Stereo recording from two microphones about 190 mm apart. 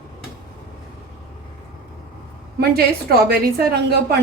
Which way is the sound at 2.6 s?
55° right (ahead or behind).